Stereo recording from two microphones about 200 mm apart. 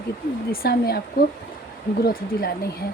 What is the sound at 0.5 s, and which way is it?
Speech, 50° left (ahead or behind).